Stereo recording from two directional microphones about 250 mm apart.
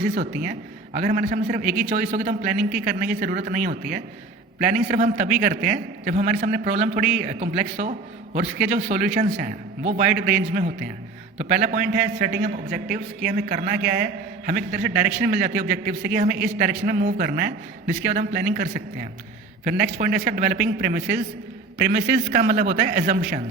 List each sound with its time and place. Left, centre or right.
0.1 s a man's voice: right